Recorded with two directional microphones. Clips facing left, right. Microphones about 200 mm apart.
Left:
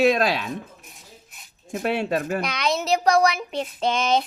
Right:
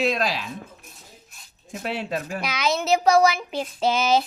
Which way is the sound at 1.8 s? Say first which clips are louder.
Left 5 dB; 55° left (ahead or behind).